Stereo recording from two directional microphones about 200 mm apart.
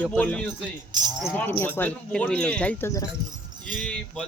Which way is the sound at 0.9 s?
20° right (ahead or behind).